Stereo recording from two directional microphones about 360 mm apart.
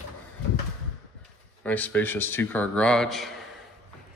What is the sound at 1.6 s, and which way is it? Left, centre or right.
Speech, centre.